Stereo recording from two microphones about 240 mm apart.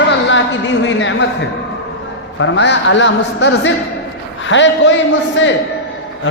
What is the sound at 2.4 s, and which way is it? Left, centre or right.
A man's voice, left.